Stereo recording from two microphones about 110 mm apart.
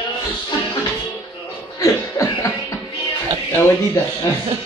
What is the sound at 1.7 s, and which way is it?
Cough, 30° left (ahead or behind).